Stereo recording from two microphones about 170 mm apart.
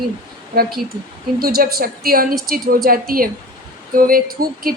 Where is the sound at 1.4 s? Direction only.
60° right (ahead or behind).